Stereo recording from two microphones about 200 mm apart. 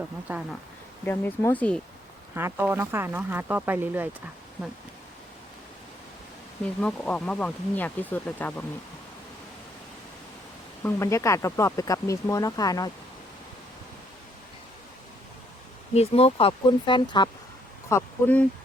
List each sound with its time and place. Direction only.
0.3 s speech: 10° right (ahead or behind)
1.0 s speech: 10° left (ahead or behind)
2.3 s speech: 10° right (ahead or behind)
6.8 s speech: 5° left (ahead or behind)
10.8 s speech: 15° left (ahead or behind)
16.0 s speech: 30° left (ahead or behind)
17.8 s speech: 10° left (ahead or behind)